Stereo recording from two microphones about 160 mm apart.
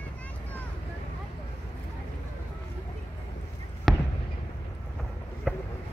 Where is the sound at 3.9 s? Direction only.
Centre (ahead or behind).